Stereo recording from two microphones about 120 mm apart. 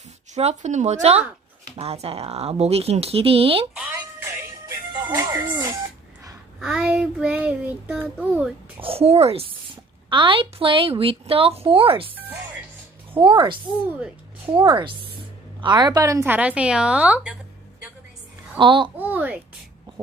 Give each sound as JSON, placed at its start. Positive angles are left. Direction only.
{"t": 0.3, "sound": "speech", "side_deg": -70}
{"t": 1.7, "sound": "speech", "side_deg": -55}
{"t": 5.1, "sound": "speech", "side_deg": -30}
{"t": 6.6, "sound": "child singing", "side_deg": -5}
{"t": 8.8, "sound": "a woman's voice", "side_deg": -55}
{"t": 13.1, "sound": "a woman's voice", "side_deg": -45}
{"t": 16.2, "sound": "child singing", "side_deg": -15}
{"t": 18.5, "sound": "a woman's voice", "side_deg": -40}
{"t": 18.9, "sound": "child singing", "side_deg": -15}